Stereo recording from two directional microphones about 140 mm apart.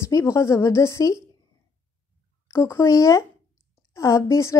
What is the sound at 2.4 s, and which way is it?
A woman's voice, 20° left (ahead or behind).